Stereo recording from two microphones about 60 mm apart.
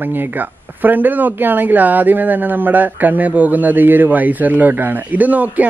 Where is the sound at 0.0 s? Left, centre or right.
Right.